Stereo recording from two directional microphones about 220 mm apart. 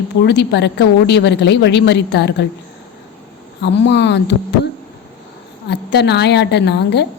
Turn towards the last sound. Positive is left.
turn(degrees=50)  # may be behind; listen again after turning